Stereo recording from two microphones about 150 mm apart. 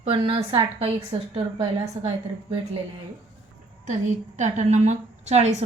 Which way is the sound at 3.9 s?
50° right (ahead or behind).